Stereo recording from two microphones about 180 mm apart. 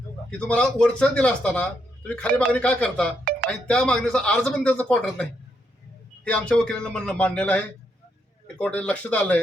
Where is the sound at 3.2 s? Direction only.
55° right (ahead or behind).